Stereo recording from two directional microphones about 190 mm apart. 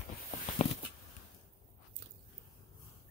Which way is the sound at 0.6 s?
35° left (ahead or behind).